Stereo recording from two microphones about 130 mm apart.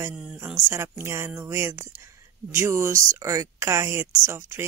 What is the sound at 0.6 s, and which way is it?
Speech, 20° right (ahead or behind).